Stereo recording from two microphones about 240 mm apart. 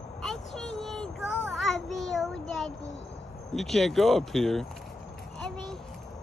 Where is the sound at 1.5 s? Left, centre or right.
Centre.